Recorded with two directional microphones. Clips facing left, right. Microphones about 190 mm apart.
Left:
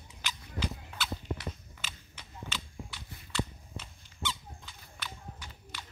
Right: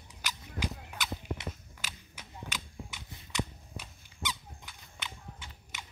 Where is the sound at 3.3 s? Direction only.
20° right (ahead or behind).